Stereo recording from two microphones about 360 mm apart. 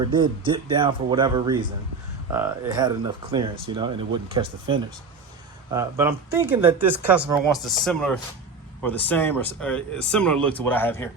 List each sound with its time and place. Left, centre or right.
0.0 s speech: centre